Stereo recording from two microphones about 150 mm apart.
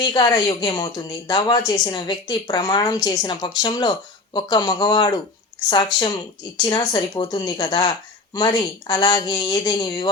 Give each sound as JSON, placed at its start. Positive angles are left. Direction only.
{"t": 0.0, "sound": "speech", "side_deg": 25}